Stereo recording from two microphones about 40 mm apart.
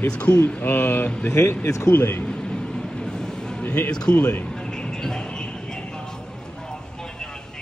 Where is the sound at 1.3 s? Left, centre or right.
Left.